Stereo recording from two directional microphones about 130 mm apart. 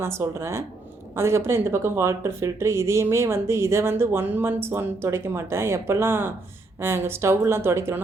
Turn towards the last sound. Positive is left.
turn(degrees=-20)  # may be behind; listen again after turning